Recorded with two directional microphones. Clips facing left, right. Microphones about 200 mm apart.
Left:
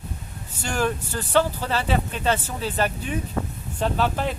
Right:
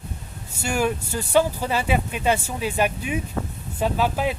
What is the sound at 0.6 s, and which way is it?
Speech, 10° right (ahead or behind).